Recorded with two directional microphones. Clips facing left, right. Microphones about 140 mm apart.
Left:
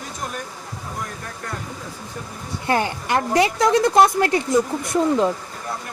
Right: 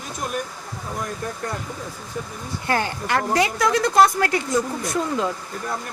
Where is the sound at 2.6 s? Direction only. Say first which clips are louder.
Left 2 dB; 20° left (ahead or behind).